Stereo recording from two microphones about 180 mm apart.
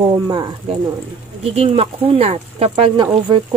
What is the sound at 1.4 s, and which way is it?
Speech, 35° right (ahead or behind).